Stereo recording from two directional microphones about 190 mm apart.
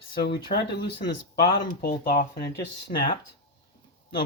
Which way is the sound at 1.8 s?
50° left (ahead or behind).